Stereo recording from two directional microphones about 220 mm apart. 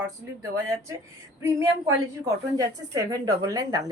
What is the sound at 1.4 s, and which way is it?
A woman's voice, 10° right (ahead or behind).